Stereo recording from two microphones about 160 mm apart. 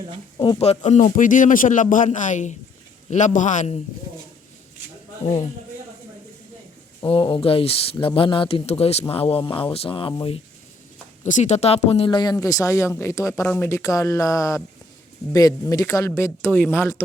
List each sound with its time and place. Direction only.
0.3 s speech: 25° left (ahead or behind)
0.6 s a man's voice: 45° left (ahead or behind)
7.1 s speech: 35° left (ahead or behind)
11.2 s speech: 50° left (ahead or behind); by 17.0 s 15° left (ahead or behind)